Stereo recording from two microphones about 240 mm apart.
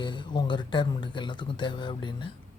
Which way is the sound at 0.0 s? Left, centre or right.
Centre.